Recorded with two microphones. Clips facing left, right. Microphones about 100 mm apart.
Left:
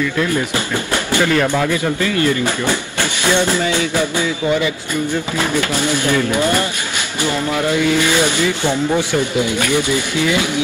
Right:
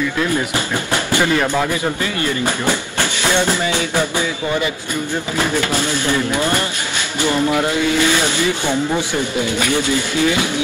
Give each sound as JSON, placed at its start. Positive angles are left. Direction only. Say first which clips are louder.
{"t": 1.1, "sound": "speech", "louder": "left 1 dB", "side_deg": -20}
{"t": 9.4, "sound": "speech", "louder": "left 1 dB", "side_deg": 15}